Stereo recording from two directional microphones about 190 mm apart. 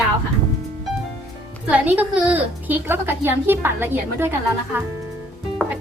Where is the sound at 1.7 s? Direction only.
5° right (ahead or behind).